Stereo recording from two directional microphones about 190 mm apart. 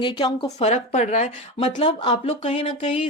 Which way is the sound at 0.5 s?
35° left (ahead or behind).